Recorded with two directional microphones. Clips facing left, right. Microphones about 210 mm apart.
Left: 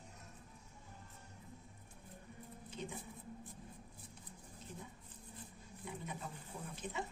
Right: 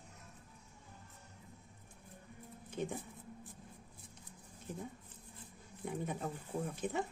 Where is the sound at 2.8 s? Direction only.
55° right (ahead or behind).